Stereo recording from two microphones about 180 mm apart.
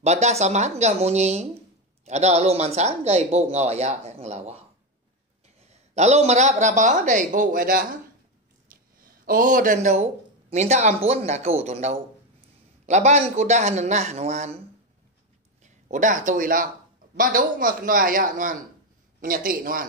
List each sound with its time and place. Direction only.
0.0 s speech: 40° right (ahead or behind)
5.7 s speech: 35° right (ahead or behind)
8.7 s a sound: 50° right (ahead or behind)
9.0 s speech: 50° right (ahead or behind)
15.6 s a man's voice: 45° right (ahead or behind)